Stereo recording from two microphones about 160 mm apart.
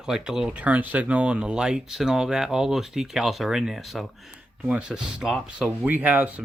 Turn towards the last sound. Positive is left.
turn(degrees=-10)  # may be behind; listen again after turning